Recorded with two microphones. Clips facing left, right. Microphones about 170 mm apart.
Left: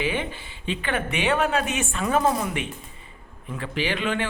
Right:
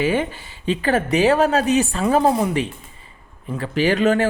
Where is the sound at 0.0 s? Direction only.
40° right (ahead or behind).